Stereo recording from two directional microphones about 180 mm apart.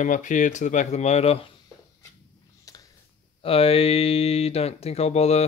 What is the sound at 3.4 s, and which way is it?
Speech, 30° left (ahead or behind).